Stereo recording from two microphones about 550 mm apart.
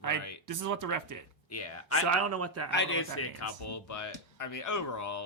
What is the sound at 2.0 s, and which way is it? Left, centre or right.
Speech, right.